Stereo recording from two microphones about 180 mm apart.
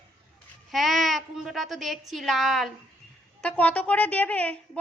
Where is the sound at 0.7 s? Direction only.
Centre (ahead or behind).